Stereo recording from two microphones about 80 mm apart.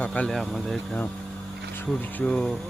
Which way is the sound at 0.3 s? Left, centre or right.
Centre.